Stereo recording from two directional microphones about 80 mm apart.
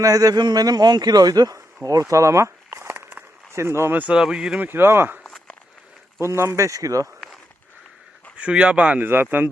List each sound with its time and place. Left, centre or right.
0.0 s a man's voice: right
0.3 s a man's voice: right
2.8 s walk: right
3.5 s speech: right
4.0 s speech: centre
4.7 s speech: right
5.2 s walk: centre
6.1 s speech: right
8.4 s speech: centre